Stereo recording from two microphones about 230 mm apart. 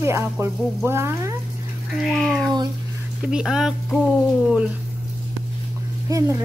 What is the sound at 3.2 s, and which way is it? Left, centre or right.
Speech, centre.